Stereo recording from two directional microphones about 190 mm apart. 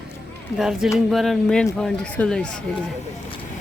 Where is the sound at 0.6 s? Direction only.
Centre (ahead or behind).